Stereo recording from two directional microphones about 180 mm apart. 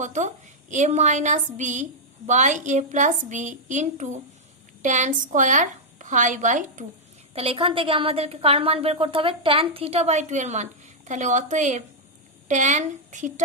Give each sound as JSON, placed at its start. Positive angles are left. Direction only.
{"t": 0.0, "sound": "a woman's voice", "side_deg": -40}
{"t": 7.3, "sound": "a woman's voice", "side_deg": -30}